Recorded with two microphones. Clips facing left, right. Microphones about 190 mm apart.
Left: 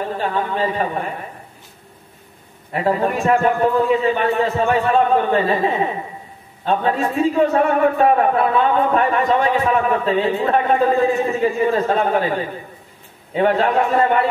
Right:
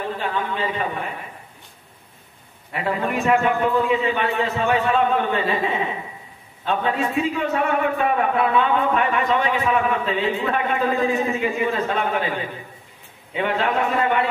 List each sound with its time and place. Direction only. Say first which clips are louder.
0.2 s a man's voice: left 6 dB; 40° left (ahead or behind)
2.7 s a man's voice: left 5 dB; 40° left (ahead or behind)